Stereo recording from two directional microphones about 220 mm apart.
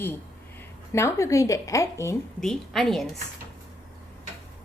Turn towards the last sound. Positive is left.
turn(degrees=0)  # may be behind; listen again after turning